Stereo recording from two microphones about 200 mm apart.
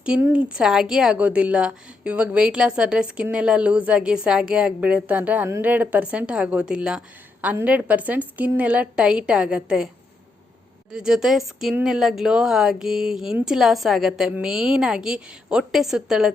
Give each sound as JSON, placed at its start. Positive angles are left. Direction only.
{"t": 0.0, "sound": "a woman's voice", "side_deg": -5}
{"t": 10.9, "sound": "a woman's voice", "side_deg": -5}